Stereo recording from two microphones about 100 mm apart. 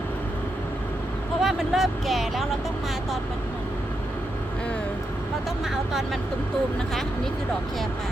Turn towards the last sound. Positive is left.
turn(degrees=-5)  # may be behind; listen again after turning